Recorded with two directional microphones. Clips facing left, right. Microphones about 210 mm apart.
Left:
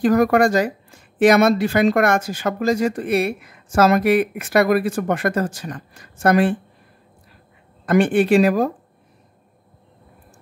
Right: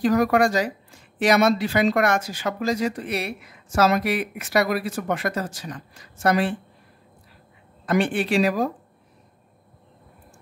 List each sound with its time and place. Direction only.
0.0 s speech: 50° left (ahead or behind)
7.8 s speech: 50° left (ahead or behind)